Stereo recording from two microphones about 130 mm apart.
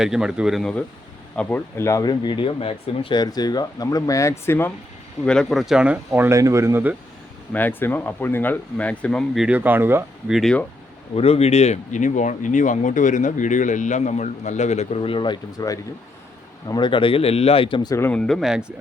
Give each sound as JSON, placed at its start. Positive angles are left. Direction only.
{"t": 0.0, "sound": "speech", "side_deg": -5}
{"t": 5.2, "sound": "speech", "side_deg": 5}
{"t": 6.1, "sound": "speech", "side_deg": -20}
{"t": 7.5, "sound": "speech", "side_deg": 15}
{"t": 9.5, "sound": "speech", "side_deg": -15}
{"t": 10.2, "sound": "speech", "side_deg": -5}
{"t": 11.1, "sound": "a man's voice", "side_deg": 50}
{"t": 18.1, "sound": "speech", "side_deg": 5}